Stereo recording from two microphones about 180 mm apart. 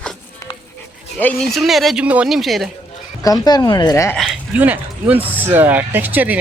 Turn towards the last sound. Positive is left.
turn(degrees=-10)  # may be behind; listen again after turning